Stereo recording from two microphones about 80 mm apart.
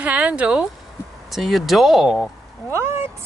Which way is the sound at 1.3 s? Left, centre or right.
Centre.